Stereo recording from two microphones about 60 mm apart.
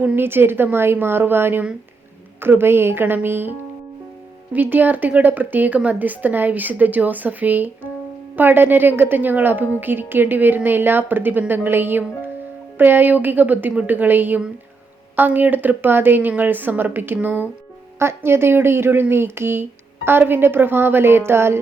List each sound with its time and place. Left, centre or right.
0.2 s a woman's voice: right
4.5 s a woman's voice: right
18.0 s a woman's voice: right